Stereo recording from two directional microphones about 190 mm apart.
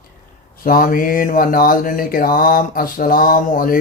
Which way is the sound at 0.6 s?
45° left (ahead or behind).